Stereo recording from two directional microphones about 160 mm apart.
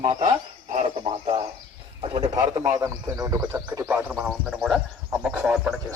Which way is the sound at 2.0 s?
35° right (ahead or behind).